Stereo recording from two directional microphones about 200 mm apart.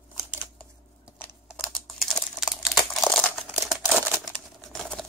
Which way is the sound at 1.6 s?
Centre (ahead or behind).